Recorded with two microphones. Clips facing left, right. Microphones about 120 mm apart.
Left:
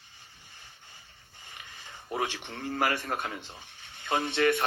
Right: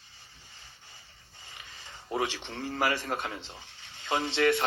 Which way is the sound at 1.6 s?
20° right (ahead or behind).